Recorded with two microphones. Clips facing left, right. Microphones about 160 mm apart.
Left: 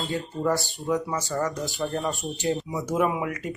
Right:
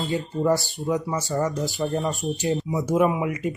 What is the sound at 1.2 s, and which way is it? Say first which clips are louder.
Speech: right 3 dB; 15° right (ahead or behind).